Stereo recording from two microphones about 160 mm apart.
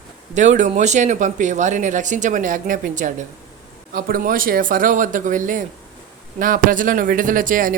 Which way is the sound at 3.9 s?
65° right (ahead or behind).